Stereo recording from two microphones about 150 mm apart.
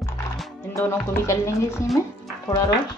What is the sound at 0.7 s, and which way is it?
Music, 20° left (ahead or behind).